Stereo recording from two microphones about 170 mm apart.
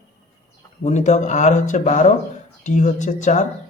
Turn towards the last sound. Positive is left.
turn(degrees=45)  # may be behind; listen again after turning